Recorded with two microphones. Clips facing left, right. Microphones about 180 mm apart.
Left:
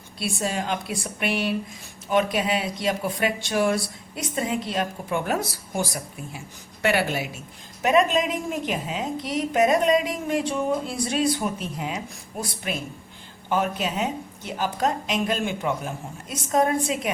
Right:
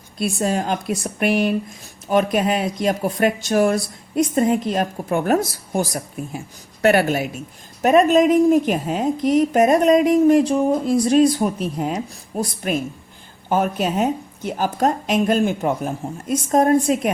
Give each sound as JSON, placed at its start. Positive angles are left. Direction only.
{"t": 0.2, "sound": "a woman's voice", "side_deg": -45}